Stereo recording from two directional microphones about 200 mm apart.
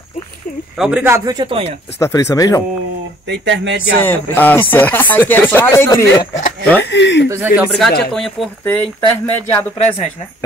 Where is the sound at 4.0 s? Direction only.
10° left (ahead or behind).